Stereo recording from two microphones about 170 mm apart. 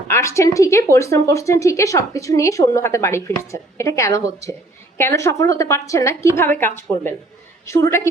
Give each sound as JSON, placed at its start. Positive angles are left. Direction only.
{"t": 0.1, "sound": "speech", "side_deg": 15}